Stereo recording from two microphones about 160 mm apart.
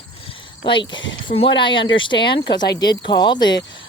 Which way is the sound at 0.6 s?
30° left (ahead or behind).